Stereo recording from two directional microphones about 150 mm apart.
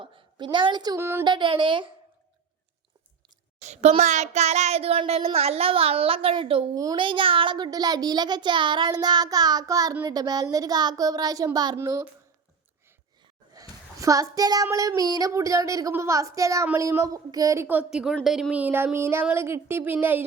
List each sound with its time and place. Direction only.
0.0 s a woman's voice: 30° right (ahead or behind)
3.6 s child singing: 45° right (ahead or behind)
6.7 s a child's voice: 30° right (ahead or behind)
13.5 s a child's voice: 25° right (ahead or behind)